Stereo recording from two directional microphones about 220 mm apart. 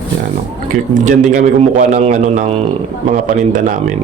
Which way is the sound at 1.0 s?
35° right (ahead or behind).